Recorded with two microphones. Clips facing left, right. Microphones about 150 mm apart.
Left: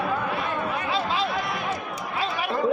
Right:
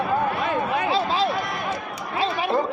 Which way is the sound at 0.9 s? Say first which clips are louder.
Right 2 dB; 35° right (ahead or behind).